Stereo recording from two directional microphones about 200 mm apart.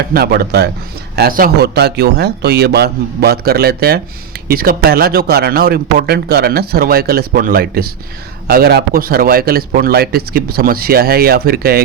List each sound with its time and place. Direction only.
0.1 s speech: 50° right (ahead or behind)